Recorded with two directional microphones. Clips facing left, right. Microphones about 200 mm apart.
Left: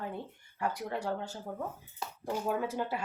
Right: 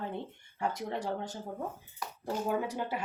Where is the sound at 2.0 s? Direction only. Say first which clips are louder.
Even; 25° left (ahead or behind).